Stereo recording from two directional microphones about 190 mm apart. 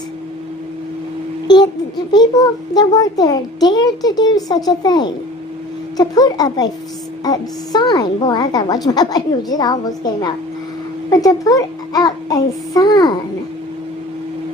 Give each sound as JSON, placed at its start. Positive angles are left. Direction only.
{"t": 1.5, "sound": "a child's voice", "side_deg": 20}